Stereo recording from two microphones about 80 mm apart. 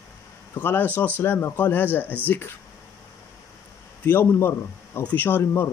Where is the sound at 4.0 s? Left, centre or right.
Left.